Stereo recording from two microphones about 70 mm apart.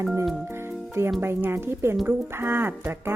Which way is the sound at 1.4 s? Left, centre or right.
Right.